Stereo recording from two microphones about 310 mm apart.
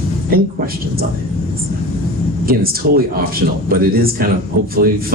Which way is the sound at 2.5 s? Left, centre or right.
Right.